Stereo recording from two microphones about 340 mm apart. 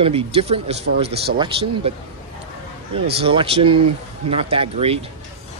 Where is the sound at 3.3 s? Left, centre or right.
Centre.